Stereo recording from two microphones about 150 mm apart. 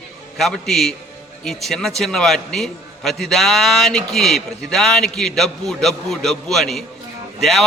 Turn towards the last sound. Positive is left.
turn(degrees=0)  # may be behind; listen again after turning